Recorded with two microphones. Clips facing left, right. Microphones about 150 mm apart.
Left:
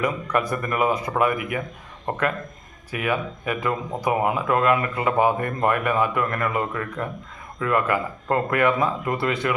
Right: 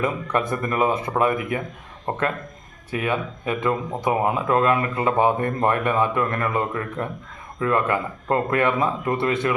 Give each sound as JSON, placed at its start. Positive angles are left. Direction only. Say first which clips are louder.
{"t": 0.0, "sound": "speech", "louder": "even", "side_deg": -25}